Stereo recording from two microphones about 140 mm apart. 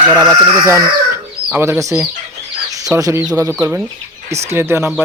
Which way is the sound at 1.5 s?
15° right (ahead or behind).